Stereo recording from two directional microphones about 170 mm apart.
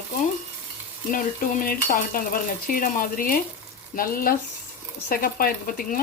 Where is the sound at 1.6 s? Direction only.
55° left (ahead or behind).